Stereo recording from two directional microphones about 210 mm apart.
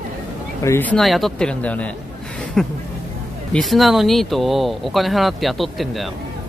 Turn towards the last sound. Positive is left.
turn(degrees=0)  # may be behind; listen again after turning